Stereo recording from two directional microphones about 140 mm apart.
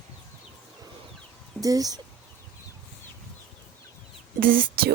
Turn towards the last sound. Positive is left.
turn(degrees=-85)